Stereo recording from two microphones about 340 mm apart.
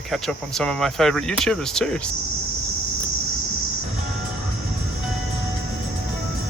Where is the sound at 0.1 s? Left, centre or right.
Centre.